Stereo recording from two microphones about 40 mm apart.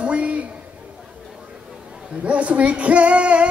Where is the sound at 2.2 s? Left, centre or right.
Right.